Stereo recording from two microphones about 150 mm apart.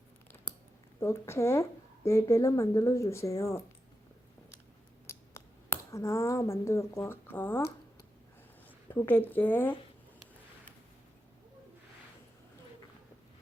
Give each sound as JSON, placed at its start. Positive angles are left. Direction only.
{"t": 0.9, "sound": "speech", "side_deg": 20}
{"t": 5.0, "sound": "speech", "side_deg": 20}
{"t": 8.9, "sound": "speech", "side_deg": 15}